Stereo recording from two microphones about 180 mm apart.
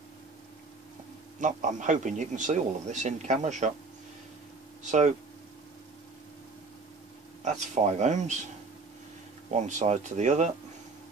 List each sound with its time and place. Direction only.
1.4 s a man's voice: 45° right (ahead or behind)
7.4 s a man's voice: 40° right (ahead or behind)
9.5 s a man's voice: 40° right (ahead or behind)